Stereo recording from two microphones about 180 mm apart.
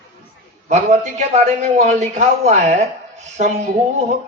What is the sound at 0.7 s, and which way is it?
A man's voice, 40° right (ahead or behind).